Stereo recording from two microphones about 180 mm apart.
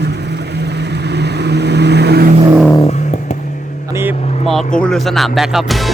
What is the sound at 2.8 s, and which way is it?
Vehicle, 40° left (ahead or behind).